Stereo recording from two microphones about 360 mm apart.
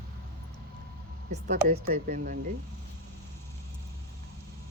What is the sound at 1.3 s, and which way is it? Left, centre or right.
Speech, right.